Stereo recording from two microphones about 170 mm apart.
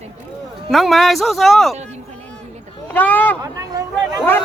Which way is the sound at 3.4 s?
20° right (ahead or behind).